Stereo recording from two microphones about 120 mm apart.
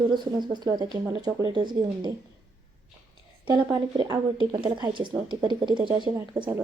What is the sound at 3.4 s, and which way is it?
A woman's voice, 35° right (ahead or behind).